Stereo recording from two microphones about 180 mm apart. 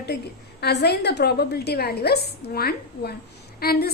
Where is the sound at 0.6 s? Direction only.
65° left (ahead or behind).